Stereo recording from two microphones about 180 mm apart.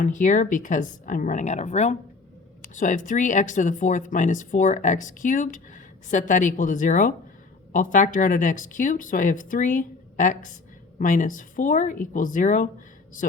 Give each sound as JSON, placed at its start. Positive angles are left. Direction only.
{"t": 0.0, "sound": "speech", "side_deg": 45}